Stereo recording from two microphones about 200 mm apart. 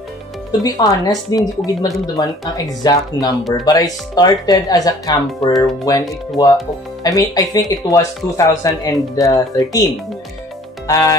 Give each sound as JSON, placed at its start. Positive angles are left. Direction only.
{"t": 0.5, "sound": "speech", "side_deg": 20}
{"t": 10.9, "sound": "speech", "side_deg": 15}